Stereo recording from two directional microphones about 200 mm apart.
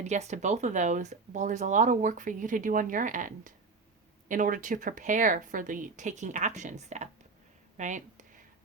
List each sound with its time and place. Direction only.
0.0 s speech: 35° right (ahead or behind)